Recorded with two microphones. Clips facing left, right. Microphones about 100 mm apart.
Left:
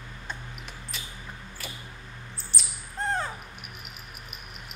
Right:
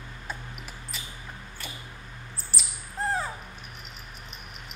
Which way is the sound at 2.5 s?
5° right (ahead or behind).